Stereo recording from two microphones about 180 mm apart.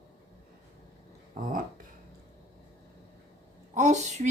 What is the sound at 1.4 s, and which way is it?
Speech, 50° right (ahead or behind).